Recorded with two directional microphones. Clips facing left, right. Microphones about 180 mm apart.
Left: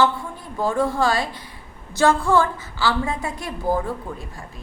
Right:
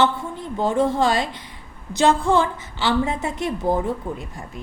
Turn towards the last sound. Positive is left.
turn(degrees=-20)  # may be behind; listen again after turning